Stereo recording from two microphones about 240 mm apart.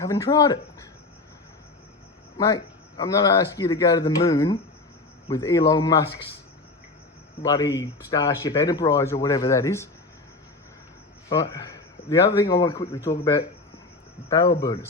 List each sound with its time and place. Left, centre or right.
0.0 s a man's voice: centre
3.0 s a man's voice: centre
7.4 s a man's voice: centre
11.5 s a man's voice: centre